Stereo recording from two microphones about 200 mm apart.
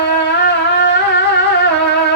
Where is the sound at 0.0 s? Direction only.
60° left (ahead or behind).